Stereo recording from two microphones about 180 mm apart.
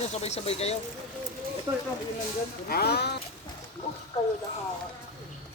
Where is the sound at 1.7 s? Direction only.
20° right (ahead or behind).